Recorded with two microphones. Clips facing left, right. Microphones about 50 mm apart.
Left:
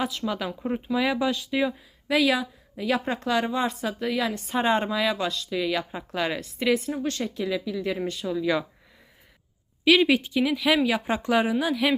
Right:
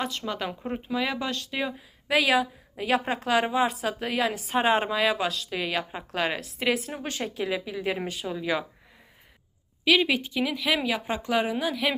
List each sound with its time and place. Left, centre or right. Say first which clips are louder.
0.0 s a woman's voice: left 2 dB; centre
5.5 s a woman's voice: left 4 dB; right
5.7 s a woman's voice: left 1 dB; centre
9.8 s a woman's voice: left 3 dB; centre